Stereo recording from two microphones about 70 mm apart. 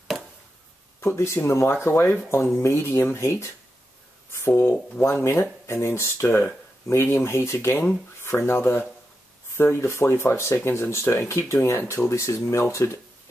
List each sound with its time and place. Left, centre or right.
1.0 s speech: left